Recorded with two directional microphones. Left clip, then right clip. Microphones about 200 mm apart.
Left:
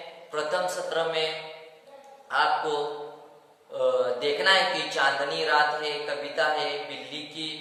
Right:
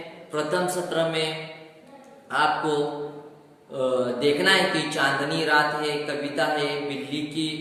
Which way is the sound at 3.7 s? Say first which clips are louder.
Even; 15° left (ahead or behind).